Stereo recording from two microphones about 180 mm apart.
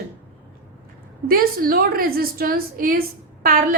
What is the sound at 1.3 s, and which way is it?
A woman's voice, 55° right (ahead or behind).